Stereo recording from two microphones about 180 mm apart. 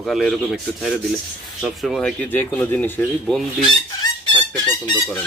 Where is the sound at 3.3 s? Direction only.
5° left (ahead or behind).